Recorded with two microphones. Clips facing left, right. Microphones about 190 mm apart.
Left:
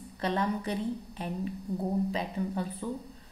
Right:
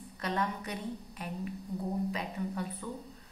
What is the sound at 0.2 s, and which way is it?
A woman's voice, 30° left (ahead or behind).